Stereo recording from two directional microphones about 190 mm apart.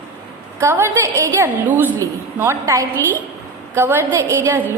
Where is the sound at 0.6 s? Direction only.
15° right (ahead or behind).